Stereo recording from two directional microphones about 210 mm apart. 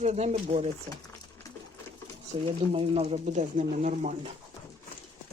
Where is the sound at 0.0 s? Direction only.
30° right (ahead or behind).